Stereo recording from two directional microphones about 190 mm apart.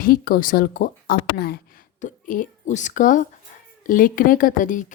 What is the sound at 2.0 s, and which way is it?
Speech, 45° left (ahead or behind).